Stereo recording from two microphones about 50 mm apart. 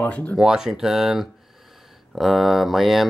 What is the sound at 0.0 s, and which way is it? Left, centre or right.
Speech, left.